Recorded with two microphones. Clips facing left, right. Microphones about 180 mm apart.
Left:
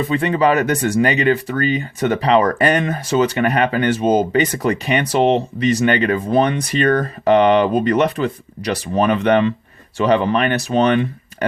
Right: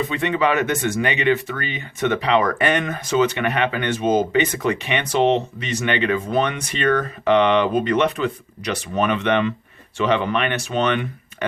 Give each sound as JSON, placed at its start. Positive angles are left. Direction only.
{"t": 0.1, "sound": "speech", "side_deg": 35}